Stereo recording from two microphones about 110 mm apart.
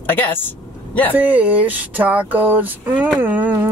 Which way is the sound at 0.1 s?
20° left (ahead or behind).